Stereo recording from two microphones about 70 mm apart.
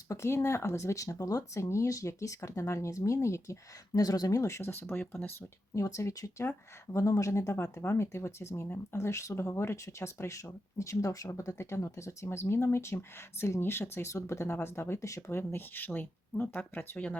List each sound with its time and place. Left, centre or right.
0.1 s speech: left
4.7 s speech: left
5.7 s speech: left
15.5 s speech: left